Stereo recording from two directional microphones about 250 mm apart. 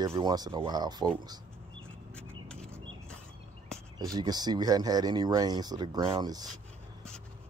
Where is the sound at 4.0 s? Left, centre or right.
Centre.